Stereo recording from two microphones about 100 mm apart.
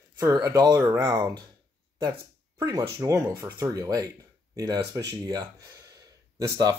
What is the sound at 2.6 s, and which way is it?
Speech, 30° right (ahead or behind).